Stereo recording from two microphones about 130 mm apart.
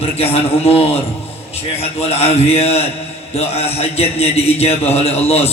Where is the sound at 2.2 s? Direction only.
50° left (ahead or behind).